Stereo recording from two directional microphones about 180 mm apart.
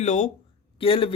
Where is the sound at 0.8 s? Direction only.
30° left (ahead or behind).